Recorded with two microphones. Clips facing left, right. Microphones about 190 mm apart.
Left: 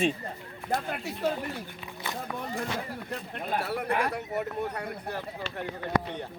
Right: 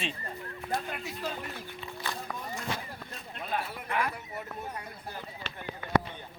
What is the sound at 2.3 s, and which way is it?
Speech, 60° left (ahead or behind).